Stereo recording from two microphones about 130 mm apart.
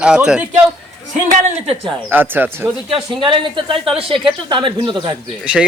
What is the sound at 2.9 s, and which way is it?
A woman's voice, 40° right (ahead or behind).